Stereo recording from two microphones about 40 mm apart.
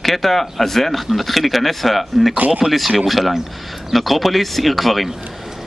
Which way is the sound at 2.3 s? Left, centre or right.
Right.